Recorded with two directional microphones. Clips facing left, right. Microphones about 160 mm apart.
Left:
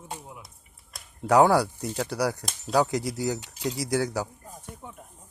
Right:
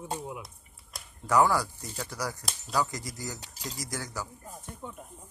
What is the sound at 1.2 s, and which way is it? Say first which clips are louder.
Speech: left 5 dB; 70° left (ahead or behind).